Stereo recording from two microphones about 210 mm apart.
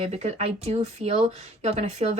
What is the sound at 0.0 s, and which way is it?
Speech, 30° right (ahead or behind).